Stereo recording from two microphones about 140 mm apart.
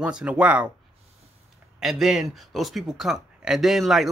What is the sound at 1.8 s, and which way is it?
Speech, centre (ahead or behind).